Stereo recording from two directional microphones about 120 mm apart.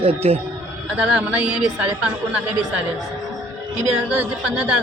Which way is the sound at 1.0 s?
10° right (ahead or behind).